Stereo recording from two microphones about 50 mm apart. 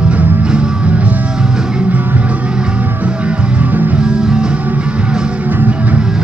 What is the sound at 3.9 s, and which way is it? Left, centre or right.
Music, centre.